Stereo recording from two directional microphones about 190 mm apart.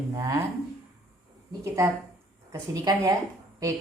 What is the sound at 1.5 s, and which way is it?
Speech, 15° right (ahead or behind).